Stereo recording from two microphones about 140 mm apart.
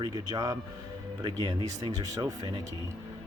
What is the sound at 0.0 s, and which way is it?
Speech, 30° right (ahead or behind).